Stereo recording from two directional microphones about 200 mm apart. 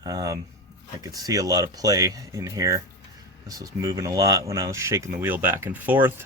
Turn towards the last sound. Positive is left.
turn(degrees=-10)  # may be behind; listen again after turning